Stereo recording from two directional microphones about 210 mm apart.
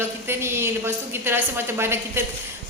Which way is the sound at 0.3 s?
10° right (ahead or behind).